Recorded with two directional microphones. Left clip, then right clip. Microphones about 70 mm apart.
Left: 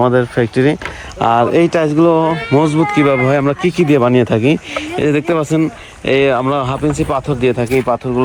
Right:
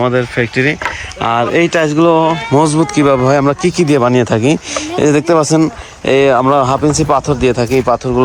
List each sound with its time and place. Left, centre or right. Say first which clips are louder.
0.0 s speech: left 1 dB; left
1.2 s speech: left 1 dB; centre
2.0 s speech: right 2 dB; centre
2.5 s speech: right 1 dB; centre
4.9 s speech: right 4 dB; right
6.1 s speech: right 3 dB; right
6.6 s speech: right 5 dB; right
7.1 s speech: right 3 dB; right